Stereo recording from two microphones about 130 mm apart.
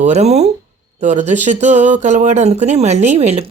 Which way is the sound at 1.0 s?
70° right (ahead or behind).